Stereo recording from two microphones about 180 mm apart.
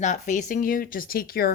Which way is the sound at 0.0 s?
40° left (ahead or behind).